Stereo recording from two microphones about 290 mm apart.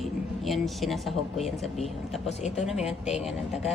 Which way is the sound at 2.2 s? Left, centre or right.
Left.